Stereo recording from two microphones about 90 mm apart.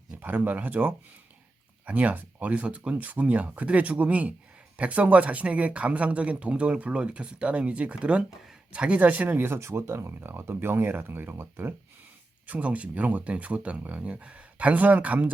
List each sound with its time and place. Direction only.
0.2 s speech: 20° right (ahead or behind)